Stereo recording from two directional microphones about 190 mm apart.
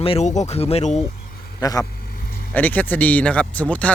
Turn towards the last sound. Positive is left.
turn(degrees=5)  # may be behind; listen again after turning